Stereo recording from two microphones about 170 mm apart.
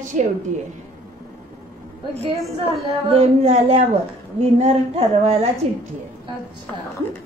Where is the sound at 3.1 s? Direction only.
40° right (ahead or behind).